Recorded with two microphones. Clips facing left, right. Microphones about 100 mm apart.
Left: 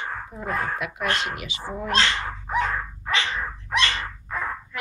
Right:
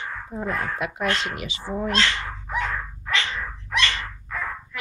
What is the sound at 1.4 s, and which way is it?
Speech, 30° right (ahead or behind).